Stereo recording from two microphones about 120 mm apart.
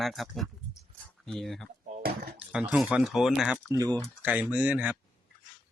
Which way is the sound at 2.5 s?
10° right (ahead or behind).